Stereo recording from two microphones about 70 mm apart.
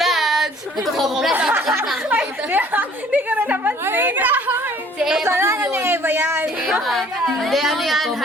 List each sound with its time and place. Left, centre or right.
0.0 s a sound: centre
0.9 s speech: centre
2.0 s a woman's voice: right
4.9 s speech: centre
5.2 s a woman's voice: right
6.8 s speech: centre